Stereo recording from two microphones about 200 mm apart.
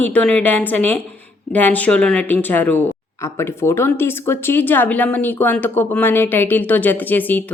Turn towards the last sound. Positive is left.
turn(degrees=10)  # may be behind; listen again after turning